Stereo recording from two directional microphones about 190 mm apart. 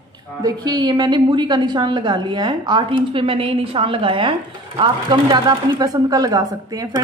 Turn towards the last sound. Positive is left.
turn(degrees=-20)  # may be behind; listen again after turning